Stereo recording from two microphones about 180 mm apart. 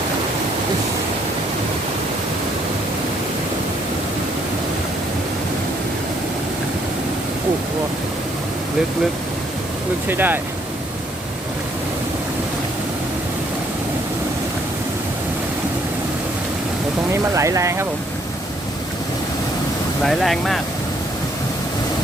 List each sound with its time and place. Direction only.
10.1 s speech: 10° right (ahead or behind)
17.3 s speech: 15° right (ahead or behind)
20.1 s speech: centre (ahead or behind)